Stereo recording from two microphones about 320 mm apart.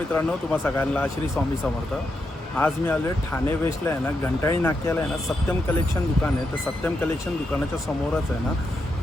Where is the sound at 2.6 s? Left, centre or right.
Centre.